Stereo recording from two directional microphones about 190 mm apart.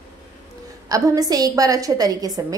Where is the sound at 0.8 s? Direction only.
20° right (ahead or behind).